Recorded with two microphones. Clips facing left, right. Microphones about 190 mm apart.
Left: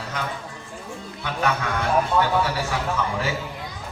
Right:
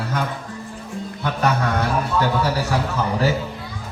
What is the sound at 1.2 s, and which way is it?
Speech, 40° right (ahead or behind).